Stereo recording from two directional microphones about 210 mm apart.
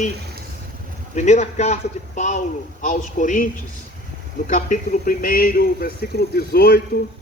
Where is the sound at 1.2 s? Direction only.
30° left (ahead or behind).